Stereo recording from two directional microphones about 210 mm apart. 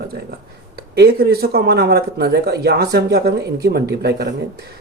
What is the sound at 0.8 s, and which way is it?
Speech, 50° right (ahead or behind).